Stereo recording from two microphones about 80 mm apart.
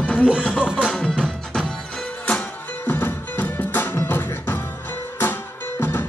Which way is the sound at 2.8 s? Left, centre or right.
Left.